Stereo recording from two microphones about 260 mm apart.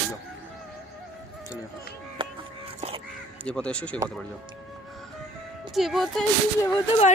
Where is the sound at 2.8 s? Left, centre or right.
Right.